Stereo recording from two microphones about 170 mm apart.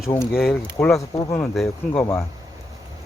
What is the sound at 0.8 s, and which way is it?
Speech, 20° left (ahead or behind).